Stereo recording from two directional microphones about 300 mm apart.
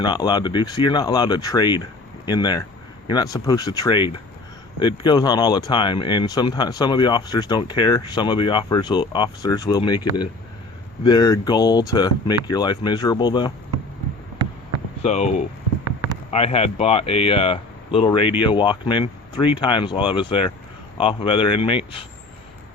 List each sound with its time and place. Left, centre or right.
0.0 s speech: centre
15.0 s speech: left